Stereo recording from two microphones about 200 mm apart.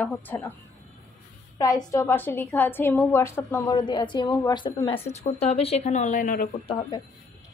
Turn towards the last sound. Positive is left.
turn(degrees=25)  # may be behind; listen again after turning